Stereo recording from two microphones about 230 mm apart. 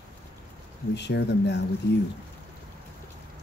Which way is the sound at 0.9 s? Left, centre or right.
Left.